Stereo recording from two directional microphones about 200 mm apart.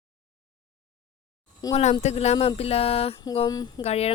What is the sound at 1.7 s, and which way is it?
Speech, 35° left (ahead or behind).